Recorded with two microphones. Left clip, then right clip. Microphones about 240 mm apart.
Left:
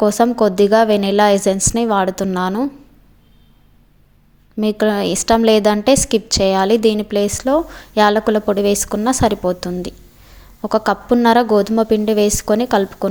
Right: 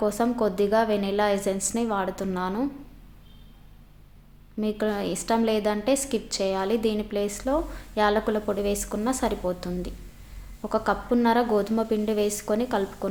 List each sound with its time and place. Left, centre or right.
0.0 s a woman's voice: left
4.5 s a woman's voice: left